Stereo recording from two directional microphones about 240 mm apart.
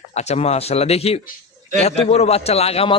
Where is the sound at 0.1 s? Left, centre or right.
Left.